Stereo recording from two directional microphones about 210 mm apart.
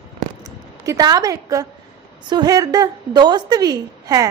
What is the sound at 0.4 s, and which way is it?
A woman's voice, 20° right (ahead or behind).